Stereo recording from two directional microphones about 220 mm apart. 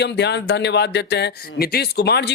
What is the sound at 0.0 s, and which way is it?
Speech, 50° left (ahead or behind).